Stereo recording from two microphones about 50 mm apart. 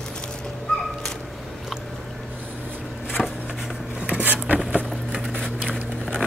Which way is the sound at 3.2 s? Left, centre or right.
Centre.